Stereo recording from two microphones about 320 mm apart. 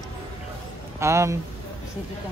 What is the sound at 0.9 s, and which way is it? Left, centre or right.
Speech, centre.